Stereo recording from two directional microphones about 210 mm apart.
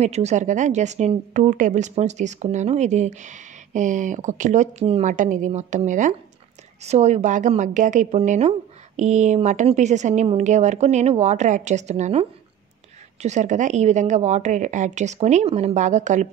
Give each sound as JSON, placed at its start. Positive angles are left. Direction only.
{"t": 0.0, "sound": "speech", "side_deg": -30}